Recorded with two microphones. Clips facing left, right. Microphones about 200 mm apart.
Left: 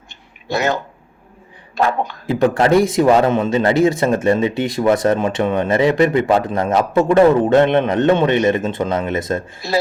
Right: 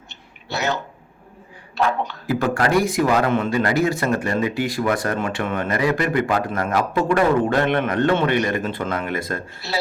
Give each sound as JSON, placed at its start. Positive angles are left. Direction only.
{"t": 0.5, "sound": "speech", "side_deg": 50}
{"t": 2.2, "sound": "a man's voice", "side_deg": 25}